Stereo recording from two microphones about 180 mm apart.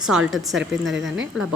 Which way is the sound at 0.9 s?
85° right.